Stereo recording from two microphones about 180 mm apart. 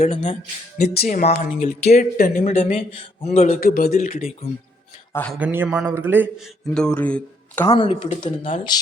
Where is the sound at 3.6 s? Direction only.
55° left (ahead or behind).